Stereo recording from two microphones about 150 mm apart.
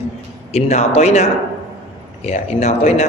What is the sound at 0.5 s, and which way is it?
A man's voice, 45° left (ahead or behind).